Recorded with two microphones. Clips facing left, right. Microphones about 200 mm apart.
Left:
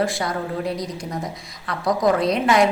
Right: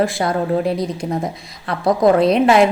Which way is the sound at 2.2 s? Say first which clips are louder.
Right 6 dB; 60° right (ahead or behind).